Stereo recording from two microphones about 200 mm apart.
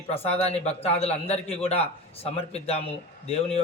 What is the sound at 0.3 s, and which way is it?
A man's voice, 30° left (ahead or behind).